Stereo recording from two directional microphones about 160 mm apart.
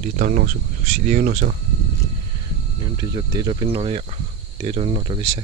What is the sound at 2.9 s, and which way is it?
Speech, 25° right (ahead or behind).